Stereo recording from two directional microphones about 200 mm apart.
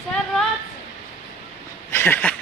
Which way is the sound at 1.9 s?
10° left (ahead or behind).